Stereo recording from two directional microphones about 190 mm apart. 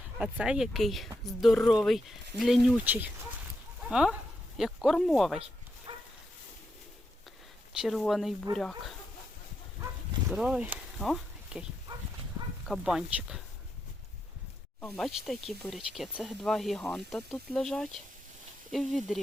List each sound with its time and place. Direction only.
0.2 s speech: 5° right (ahead or behind)
5.9 s a sound: 25° right (ahead or behind)
7.7 s speech: centre (ahead or behind)
10.2 s speech: 5° right (ahead or behind)
12.6 s speech: centre (ahead or behind)
14.8 s speech: 5° left (ahead or behind)